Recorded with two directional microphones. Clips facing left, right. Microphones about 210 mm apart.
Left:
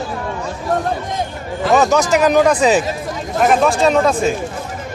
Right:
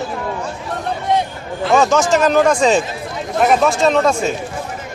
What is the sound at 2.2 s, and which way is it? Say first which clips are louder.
Speech: left 1 dB; 10° left (ahead or behind).